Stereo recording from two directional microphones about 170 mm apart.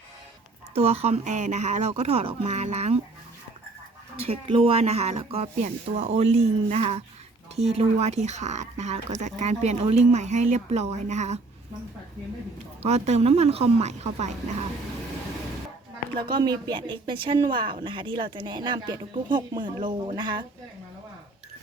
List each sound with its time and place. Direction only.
0.7 s speech: 35° right (ahead or behind)
4.2 s speech: 35° right (ahead or behind)
12.8 s speech: 40° right (ahead or behind)
16.1 s speech: 25° right (ahead or behind)